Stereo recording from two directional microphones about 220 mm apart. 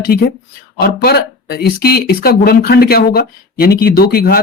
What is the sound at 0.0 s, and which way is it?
Speech, 45° left (ahead or behind).